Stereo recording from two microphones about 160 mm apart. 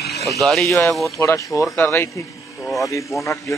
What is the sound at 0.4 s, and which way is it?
Speech, centre (ahead or behind).